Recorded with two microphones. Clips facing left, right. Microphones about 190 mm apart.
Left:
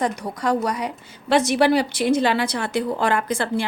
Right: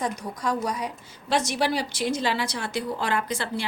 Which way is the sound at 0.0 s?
70° left (ahead or behind).